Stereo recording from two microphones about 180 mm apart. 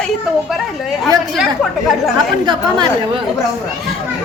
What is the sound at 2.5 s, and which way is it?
Speech, 25° right (ahead or behind).